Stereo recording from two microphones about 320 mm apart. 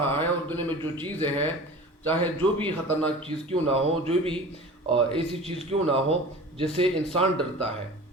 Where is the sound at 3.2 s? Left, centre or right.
Centre.